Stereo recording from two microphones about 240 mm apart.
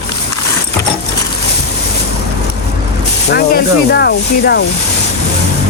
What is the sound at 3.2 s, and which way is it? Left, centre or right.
Speech, left.